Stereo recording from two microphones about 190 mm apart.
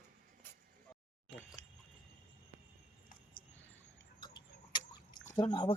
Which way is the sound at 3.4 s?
45° left (ahead or behind).